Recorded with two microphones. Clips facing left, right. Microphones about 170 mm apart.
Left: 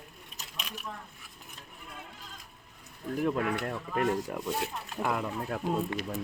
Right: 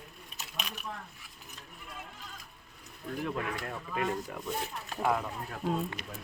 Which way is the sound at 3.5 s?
50° left (ahead or behind).